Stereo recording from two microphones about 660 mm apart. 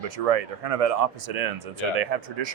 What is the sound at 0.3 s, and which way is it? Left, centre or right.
Speech, right.